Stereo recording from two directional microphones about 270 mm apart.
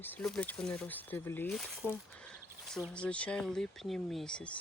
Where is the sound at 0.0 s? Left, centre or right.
Centre.